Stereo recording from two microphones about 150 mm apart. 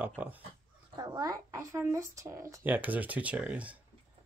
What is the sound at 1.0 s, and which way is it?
Speech, 25° right (ahead or behind).